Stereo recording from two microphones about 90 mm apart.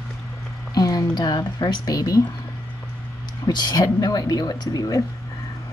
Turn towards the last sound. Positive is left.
turn(degrees=45)  # may be behind; listen again after turning